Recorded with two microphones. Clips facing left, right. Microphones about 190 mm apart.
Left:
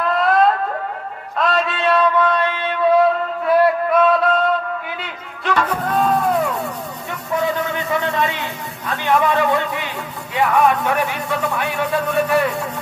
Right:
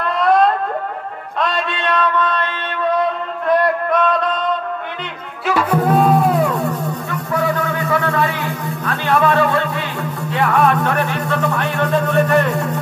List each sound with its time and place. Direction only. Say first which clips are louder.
0.0 s alarm: right 1 dB; centre (ahead or behind)
1.4 s a sound: left 2 dB; centre (ahead or behind)
3.4 s music: left 1 dB; 5° left (ahead or behind)
5.4 s music: right 4 dB; 10° right (ahead or behind)
8.0 s a sound: right 2 dB; 20° left (ahead or behind)
10.3 s a man's voice: even; 10° left (ahead or behind)